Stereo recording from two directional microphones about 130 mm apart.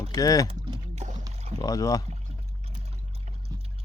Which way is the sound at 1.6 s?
25° left (ahead or behind).